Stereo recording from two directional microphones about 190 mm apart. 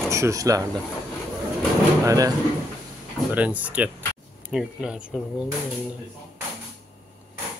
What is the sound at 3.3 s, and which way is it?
Speech, 10° right (ahead or behind).